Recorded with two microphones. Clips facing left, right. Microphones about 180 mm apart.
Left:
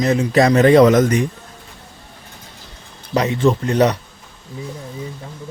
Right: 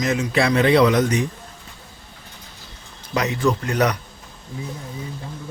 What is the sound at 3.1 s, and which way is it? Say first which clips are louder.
Speech: left 4 dB; 25° left (ahead or behind).